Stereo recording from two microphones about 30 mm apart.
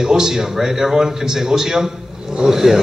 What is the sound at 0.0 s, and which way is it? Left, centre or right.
A man's voice, right.